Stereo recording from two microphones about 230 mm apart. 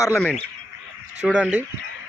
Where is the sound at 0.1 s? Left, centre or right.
Centre.